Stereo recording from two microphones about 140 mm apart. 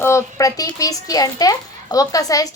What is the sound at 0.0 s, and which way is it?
A child's voice, 20° left (ahead or behind).